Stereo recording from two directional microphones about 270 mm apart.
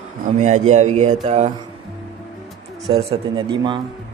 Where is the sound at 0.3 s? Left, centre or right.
Right.